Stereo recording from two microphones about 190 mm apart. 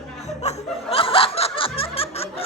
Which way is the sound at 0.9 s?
30° left (ahead or behind).